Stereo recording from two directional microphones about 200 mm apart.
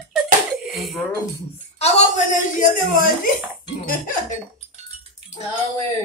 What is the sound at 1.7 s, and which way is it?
A woman's voice, 35° left (ahead or behind).